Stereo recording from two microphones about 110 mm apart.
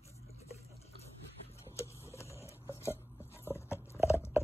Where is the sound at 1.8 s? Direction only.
25° left (ahead or behind).